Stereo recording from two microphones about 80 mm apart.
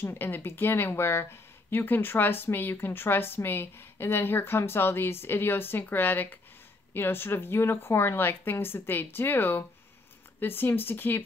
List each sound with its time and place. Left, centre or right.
0.0 s speech: left